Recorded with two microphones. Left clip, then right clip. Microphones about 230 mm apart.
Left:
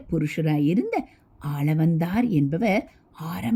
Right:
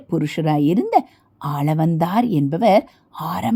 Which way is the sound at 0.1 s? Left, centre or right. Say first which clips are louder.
Right 6 dB; centre.